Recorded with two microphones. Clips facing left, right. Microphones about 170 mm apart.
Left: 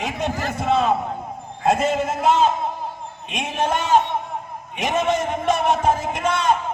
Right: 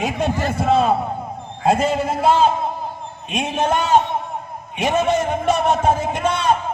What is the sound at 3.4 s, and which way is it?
Speech, centre (ahead or behind).